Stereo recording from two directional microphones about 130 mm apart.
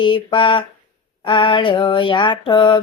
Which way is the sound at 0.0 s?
40° left (ahead or behind).